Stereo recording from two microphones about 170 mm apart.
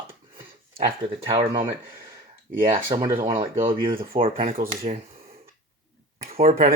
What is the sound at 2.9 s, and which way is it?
Speech, 20° right (ahead or behind).